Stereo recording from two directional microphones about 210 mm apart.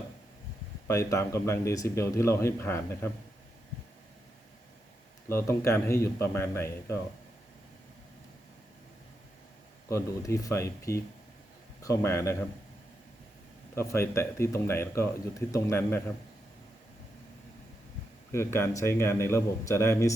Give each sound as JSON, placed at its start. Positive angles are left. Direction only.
{"t": 0.9, "sound": "speech", "side_deg": 15}
{"t": 5.3, "sound": "speech", "side_deg": 10}
{"t": 9.9, "sound": "speech", "side_deg": 15}
{"t": 13.7, "sound": "speech", "side_deg": 10}
{"t": 18.3, "sound": "speech", "side_deg": 10}